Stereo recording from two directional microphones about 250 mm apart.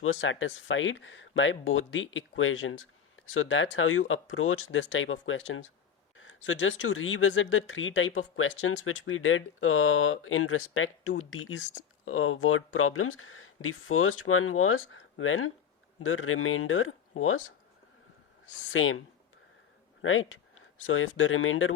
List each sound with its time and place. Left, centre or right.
0.0 s speech: left
18.7 s speech: left
20.0 s speech: left